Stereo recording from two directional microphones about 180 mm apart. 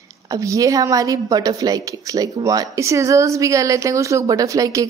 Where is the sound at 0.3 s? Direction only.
20° right (ahead or behind).